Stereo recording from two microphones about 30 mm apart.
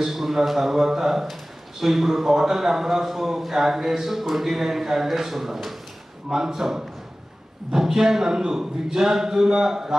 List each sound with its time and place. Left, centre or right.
0.0 s a man's voice: centre